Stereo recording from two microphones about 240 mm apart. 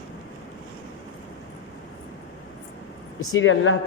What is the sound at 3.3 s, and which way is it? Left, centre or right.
Speech, left.